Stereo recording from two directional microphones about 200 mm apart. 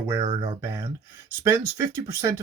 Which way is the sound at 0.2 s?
25° right (ahead or behind).